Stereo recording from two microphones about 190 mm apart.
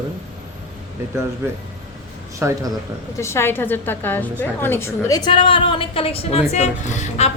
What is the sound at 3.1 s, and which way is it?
A woman's voice, 15° left (ahead or behind).